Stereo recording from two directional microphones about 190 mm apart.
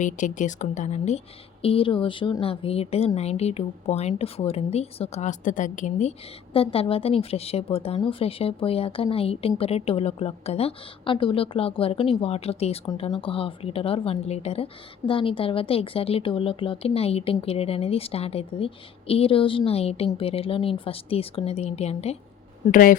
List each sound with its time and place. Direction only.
0.0 s a woman's voice: 40° left (ahead or behind)
22.6 s speech: 45° left (ahead or behind)